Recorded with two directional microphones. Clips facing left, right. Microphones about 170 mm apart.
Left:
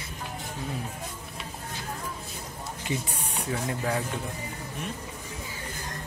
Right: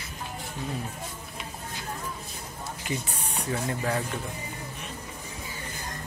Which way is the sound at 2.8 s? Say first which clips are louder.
Left 1 dB; 25° left (ahead or behind).